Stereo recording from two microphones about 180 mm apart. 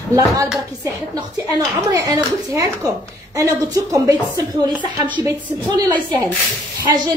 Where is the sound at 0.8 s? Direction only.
20° right (ahead or behind).